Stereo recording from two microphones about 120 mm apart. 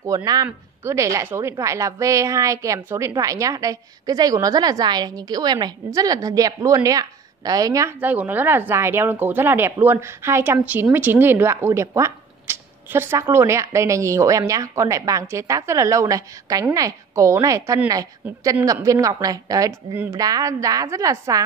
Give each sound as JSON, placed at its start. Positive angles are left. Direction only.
{"t": 0.0, "sound": "a woman's voice", "side_deg": -30}
{"t": 8.0, "sound": "speech", "side_deg": -15}